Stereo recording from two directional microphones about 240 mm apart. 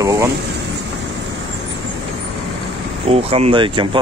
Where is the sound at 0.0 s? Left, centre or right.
Centre.